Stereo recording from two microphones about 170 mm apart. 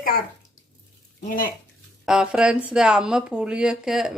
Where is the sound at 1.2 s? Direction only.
50° left (ahead or behind).